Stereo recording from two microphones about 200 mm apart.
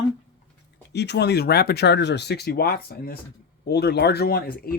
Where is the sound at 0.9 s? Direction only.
60° left (ahead or behind).